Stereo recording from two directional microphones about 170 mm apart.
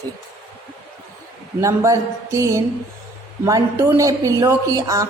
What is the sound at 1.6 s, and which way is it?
A woman's voice, 20° right (ahead or behind).